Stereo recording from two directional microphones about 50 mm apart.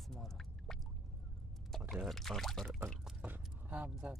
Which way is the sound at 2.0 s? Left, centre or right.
Centre.